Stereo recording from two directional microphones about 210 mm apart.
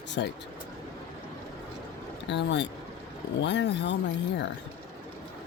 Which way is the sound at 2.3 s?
55° left (ahead or behind).